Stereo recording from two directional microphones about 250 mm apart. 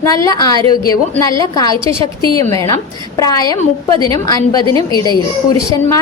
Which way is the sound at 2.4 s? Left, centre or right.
Centre.